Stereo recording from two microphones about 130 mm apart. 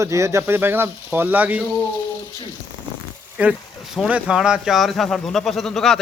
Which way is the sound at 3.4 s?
10° right (ahead or behind).